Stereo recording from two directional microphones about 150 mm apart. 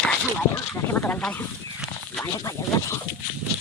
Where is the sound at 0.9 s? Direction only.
15° left (ahead or behind).